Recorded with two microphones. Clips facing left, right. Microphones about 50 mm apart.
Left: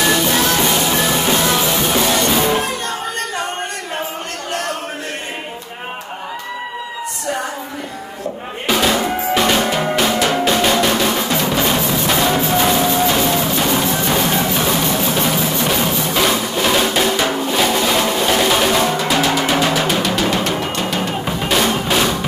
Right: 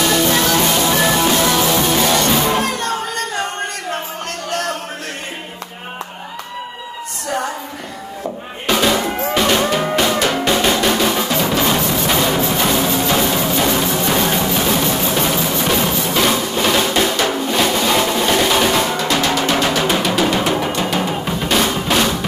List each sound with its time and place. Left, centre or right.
1.2 s music: centre
8.6 s drum: centre
21.5 s music: centre